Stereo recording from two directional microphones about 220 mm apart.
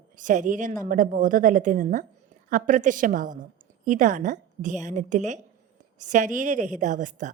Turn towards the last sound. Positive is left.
turn(degrees=-35)  # may be behind; listen again after turning